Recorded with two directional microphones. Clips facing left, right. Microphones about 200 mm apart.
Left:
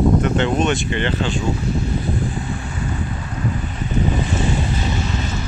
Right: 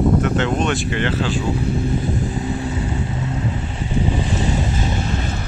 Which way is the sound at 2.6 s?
25° right (ahead or behind).